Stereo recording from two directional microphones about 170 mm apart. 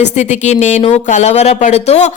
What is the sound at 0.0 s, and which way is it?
A woman's voice, 40° left (ahead or behind).